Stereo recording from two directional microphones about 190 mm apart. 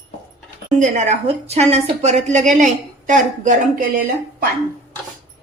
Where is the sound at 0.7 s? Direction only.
40° right (ahead or behind).